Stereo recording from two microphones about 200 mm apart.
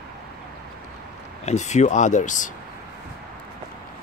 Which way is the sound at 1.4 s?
35° left (ahead or behind).